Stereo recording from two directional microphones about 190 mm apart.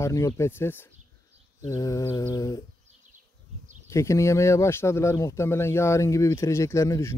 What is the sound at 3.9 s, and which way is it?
Speech, 15° left (ahead or behind).